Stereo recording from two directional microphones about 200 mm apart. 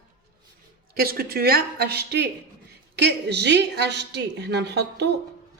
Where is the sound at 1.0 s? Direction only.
50° right (ahead or behind).